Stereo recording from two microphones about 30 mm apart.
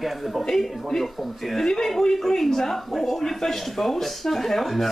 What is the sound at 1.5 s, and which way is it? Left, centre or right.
Speech, centre.